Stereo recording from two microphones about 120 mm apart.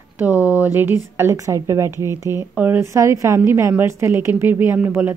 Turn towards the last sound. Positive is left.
turn(degrees=-15)  # may be behind; listen again after turning